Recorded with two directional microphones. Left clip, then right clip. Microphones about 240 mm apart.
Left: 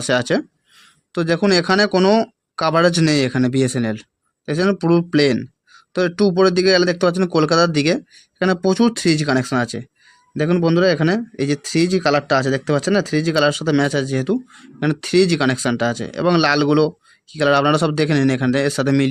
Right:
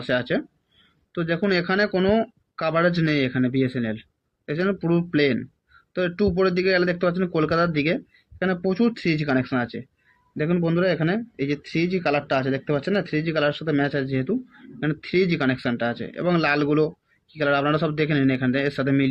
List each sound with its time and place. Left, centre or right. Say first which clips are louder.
0.0 s speech: left 6 dB; left